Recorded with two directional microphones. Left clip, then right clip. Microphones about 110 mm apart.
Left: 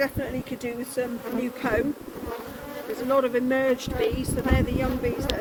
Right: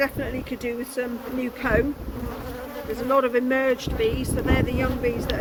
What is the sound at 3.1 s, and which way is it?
Speech, 35° left (ahead or behind).